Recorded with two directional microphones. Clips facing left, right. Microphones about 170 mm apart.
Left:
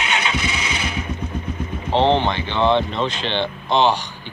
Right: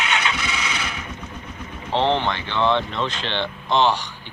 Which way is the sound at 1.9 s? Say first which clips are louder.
Left 3 dB; 20° left (ahead or behind).